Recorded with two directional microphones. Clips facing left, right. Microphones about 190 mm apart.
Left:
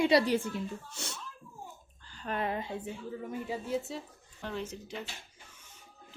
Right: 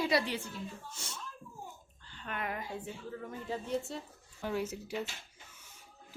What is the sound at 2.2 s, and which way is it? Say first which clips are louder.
Speech: left 5 dB; 35° left (ahead or behind).